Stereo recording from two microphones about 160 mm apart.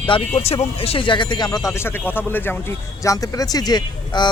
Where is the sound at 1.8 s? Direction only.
10° left (ahead or behind).